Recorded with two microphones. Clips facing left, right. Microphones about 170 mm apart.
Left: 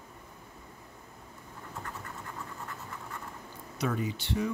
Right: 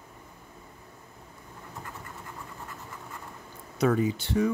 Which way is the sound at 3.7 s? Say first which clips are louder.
Right 8 dB; 45° right (ahead or behind).